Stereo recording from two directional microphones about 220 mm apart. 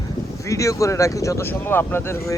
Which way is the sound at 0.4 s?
15° left (ahead or behind).